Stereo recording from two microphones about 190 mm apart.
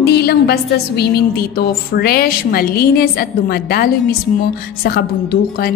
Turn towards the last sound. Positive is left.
turn(degrees=55)  # may be behind; listen again after turning